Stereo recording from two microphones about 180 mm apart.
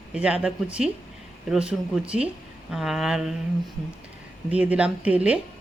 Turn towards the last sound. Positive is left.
turn(degrees=-5)  # may be behind; listen again after turning